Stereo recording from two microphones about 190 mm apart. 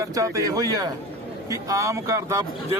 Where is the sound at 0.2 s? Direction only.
15° right (ahead or behind).